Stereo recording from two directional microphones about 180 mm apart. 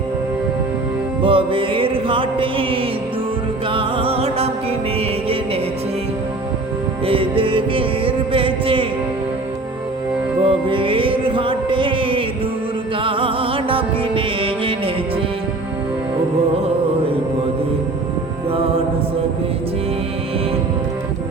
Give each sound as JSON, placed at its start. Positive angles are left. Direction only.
{"t": 1.2, "sound": "music", "side_deg": -30}
{"t": 7.0, "sound": "music", "side_deg": -30}
{"t": 10.4, "sound": "music", "side_deg": -30}